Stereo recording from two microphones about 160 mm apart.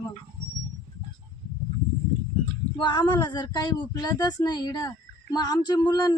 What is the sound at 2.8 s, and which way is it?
Speech, 30° left (ahead or behind).